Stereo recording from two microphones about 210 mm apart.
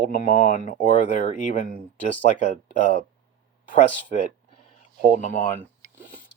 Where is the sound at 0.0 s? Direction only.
40° left (ahead or behind).